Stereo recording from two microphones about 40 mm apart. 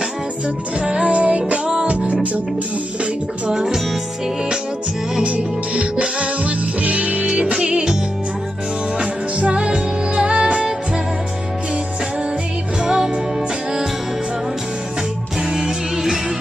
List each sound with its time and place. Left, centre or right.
0.7 s music: right
1.7 s music: right
3.4 s speech: centre
5.2 s music: right
12.8 s music: right